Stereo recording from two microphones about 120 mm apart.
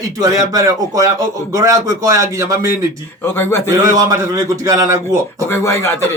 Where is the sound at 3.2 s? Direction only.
20° left (ahead or behind).